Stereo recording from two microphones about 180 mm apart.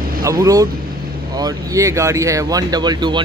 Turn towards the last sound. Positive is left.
turn(degrees=-25)  # may be behind; listen again after turning